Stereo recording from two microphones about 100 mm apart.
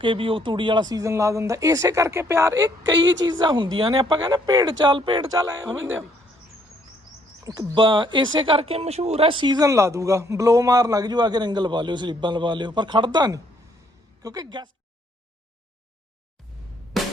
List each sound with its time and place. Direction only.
0.0 s speech: 60° right (ahead or behind)
3.9 s speech: 40° right (ahead or behind); by 5.2 s 55° right (ahead or behind)
5.3 s speech: 30° right (ahead or behind)
7.4 s speech: 35° right (ahead or behind)
7.8 s speech: 55° right (ahead or behind)